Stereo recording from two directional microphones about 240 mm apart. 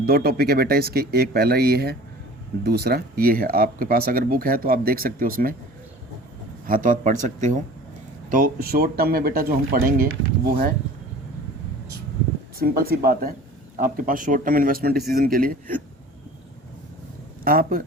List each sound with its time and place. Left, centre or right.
0.0 s speech: right
6.7 s speech: right
12.5 s speech: right
17.4 s speech: right